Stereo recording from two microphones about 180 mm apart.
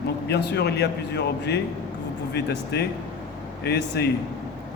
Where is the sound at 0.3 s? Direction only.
65° left (ahead or behind).